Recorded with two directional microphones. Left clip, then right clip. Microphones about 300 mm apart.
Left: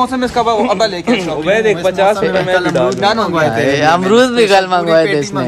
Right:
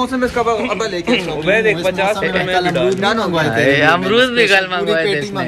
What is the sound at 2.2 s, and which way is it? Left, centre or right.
Speech, centre.